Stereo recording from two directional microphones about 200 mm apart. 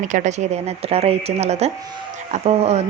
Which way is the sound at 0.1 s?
35° right (ahead or behind).